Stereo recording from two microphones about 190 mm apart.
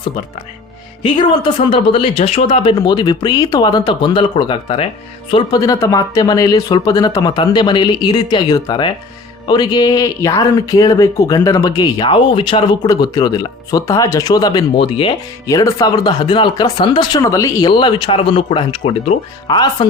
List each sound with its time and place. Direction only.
1.0 s speech: 25° left (ahead or behind)
15.4 s speech: 15° left (ahead or behind)